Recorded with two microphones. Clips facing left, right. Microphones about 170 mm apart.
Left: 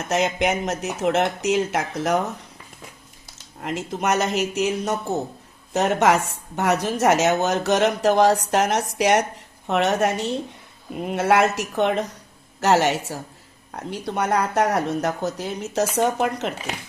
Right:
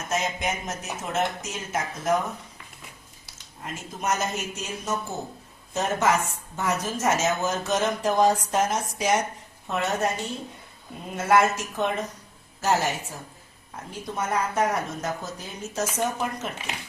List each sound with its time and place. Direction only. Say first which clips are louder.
0.1 s speech: left 7 dB; 75° left (ahead or behind)
3.6 s speech: left 7 dB; 75° left (ahead or behind)